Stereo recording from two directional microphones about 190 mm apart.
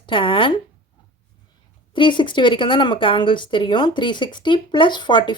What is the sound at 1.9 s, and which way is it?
Speech, 25° left (ahead or behind).